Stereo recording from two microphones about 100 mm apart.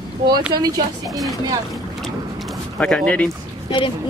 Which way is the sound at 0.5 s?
40° right (ahead or behind).